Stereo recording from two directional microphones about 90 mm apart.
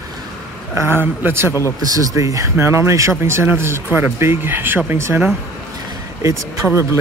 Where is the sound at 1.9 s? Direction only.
40° right (ahead or behind).